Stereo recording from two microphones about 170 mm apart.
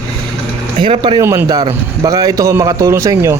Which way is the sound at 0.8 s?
30° right (ahead or behind).